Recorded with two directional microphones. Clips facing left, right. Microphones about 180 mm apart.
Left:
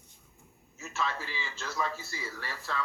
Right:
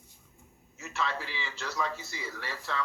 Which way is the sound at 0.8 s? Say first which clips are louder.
Right 1 dB; 15° right (ahead or behind).